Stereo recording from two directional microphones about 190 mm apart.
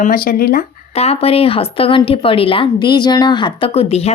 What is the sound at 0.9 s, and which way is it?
A woman's voice, 30° left (ahead or behind).